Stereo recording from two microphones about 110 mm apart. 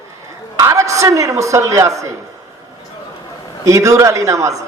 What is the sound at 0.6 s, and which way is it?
Speech, 25° right (ahead or behind).